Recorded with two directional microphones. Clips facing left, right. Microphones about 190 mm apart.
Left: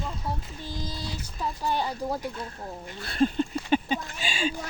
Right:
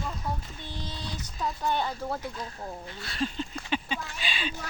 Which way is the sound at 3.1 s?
50° left (ahead or behind).